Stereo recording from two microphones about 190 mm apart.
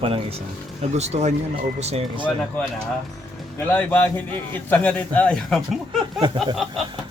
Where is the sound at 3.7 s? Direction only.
10° left (ahead or behind).